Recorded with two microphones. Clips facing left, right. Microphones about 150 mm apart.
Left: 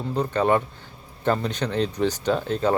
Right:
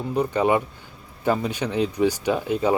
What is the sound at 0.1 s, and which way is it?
Speech, 10° right (ahead or behind).